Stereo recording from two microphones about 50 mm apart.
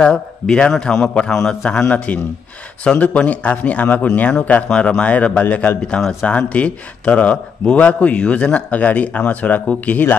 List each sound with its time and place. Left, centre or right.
0.0 s a man's voice: centre
4.6 s speech: centre